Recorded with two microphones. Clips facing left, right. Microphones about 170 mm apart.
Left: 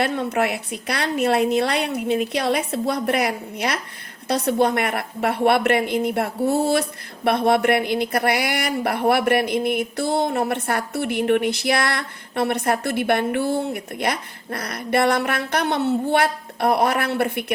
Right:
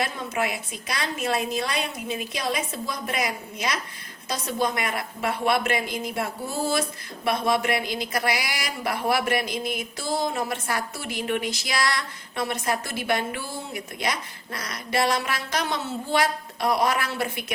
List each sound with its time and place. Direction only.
0.0 s speech: 65° left (ahead or behind)